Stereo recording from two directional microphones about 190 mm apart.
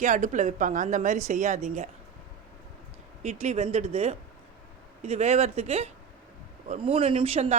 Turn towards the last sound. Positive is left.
turn(degrees=-35)  # may be behind; listen again after turning